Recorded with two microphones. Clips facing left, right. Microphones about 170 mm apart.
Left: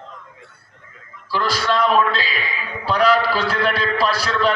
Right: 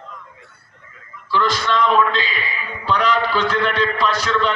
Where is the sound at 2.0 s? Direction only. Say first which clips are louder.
Right 1 dB; 35° left (ahead or behind).